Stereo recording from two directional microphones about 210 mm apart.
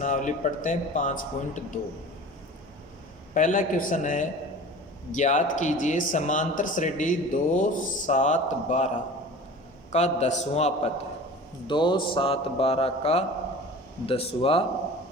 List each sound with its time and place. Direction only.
0.0 s speech: 35° left (ahead or behind)
3.3 s speech: 40° left (ahead or behind)
9.9 s a man's voice: 30° left (ahead or behind)